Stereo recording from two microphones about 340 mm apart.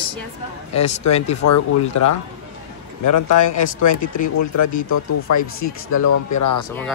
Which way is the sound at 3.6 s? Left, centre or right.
Left.